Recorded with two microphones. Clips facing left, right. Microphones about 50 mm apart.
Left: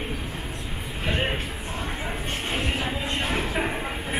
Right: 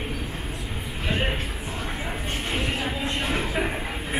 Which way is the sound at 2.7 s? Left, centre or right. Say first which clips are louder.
Even; centre.